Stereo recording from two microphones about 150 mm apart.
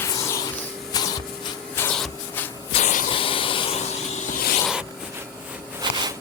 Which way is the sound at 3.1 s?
35° left (ahead or behind).